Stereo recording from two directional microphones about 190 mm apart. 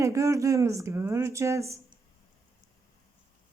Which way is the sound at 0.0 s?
15° right (ahead or behind).